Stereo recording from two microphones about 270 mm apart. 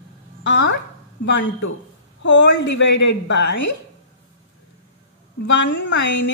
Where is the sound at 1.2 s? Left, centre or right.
Left.